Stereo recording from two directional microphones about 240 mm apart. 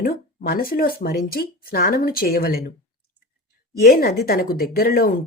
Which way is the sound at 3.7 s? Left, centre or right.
Left.